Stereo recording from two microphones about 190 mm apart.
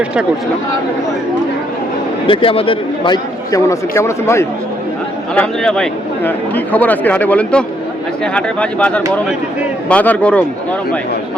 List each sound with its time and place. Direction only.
2.2 s speech: 25° left (ahead or behind); by 11.0 s 5° left (ahead or behind)